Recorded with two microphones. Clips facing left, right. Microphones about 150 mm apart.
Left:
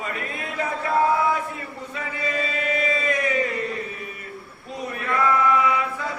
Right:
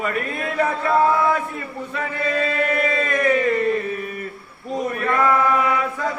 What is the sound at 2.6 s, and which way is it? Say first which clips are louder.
Chant: right 4 dB; 55° right (ahead or behind).